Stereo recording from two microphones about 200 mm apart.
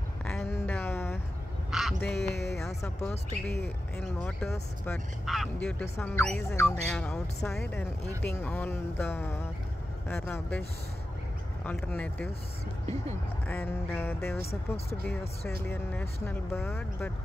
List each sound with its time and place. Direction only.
0.3 s a sound: 5° left (ahead or behind)
1.7 s quack: centre (ahead or behind)
2.2 s speech: 55° left (ahead or behind)
2.8 s speech: 5° left (ahead or behind)
11.6 s speech: 5° left (ahead or behind)
13.5 s speech: 10° left (ahead or behind)